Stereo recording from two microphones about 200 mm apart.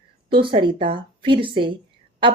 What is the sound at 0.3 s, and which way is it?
Speech, 25° right (ahead or behind).